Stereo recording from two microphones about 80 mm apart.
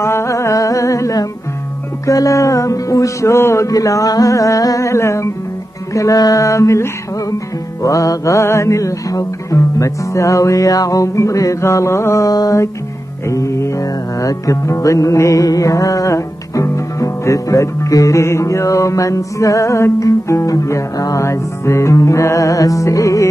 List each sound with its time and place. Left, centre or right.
0.0 s music: left
12.3 s music: left